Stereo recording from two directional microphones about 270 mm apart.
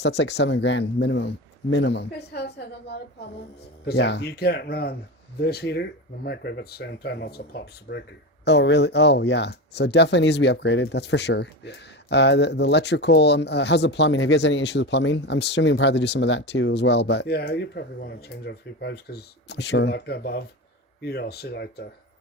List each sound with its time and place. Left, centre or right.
0.0 s speech: left